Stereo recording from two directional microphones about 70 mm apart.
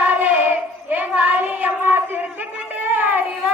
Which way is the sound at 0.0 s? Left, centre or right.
Right.